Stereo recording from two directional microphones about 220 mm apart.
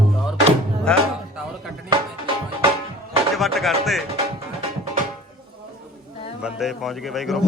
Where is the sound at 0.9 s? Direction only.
5° left (ahead or behind).